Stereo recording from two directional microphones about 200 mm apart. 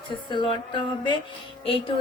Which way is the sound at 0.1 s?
25° left (ahead or behind).